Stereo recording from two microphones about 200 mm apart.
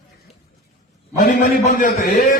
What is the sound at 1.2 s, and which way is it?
Speech, 45° left (ahead or behind).